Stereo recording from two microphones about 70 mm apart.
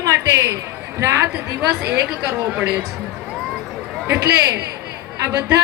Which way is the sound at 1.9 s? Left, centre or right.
Centre.